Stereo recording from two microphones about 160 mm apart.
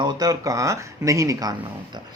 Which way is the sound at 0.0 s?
25° right (ahead or behind).